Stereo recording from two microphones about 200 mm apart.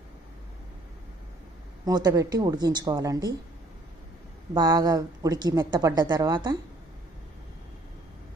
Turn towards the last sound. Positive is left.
turn(degrees=-20)  # may be behind; listen again after turning